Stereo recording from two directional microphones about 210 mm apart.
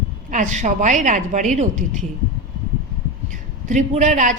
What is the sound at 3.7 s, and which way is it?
Speech, 35° right (ahead or behind).